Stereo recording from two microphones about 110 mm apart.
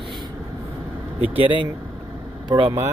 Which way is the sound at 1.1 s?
60° right (ahead or behind).